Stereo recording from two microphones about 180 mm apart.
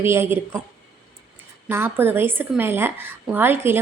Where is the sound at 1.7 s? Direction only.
10° right (ahead or behind).